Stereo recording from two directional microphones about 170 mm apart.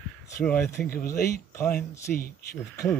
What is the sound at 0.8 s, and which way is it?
Speech, 60° left (ahead or behind).